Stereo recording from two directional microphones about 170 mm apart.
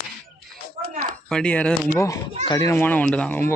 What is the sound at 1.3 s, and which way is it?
Speech, 5° left (ahead or behind).